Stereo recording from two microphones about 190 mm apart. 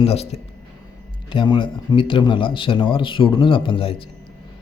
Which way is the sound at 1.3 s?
25° left (ahead or behind).